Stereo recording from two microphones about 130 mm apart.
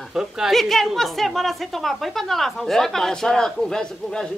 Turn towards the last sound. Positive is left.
turn(degrees=5)  # may be behind; listen again after turning